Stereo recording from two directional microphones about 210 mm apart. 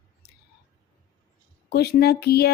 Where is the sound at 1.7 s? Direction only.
50° left (ahead or behind).